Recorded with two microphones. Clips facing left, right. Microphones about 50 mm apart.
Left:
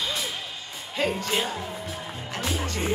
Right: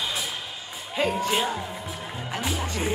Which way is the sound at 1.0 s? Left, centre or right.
Centre.